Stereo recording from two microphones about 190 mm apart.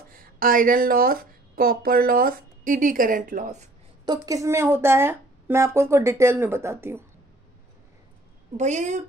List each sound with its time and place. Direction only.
0.1 s speech: 50° right (ahead or behind)
4.0 s speech: 20° right (ahead or behind)
8.5 s a woman's voice: 40° right (ahead or behind)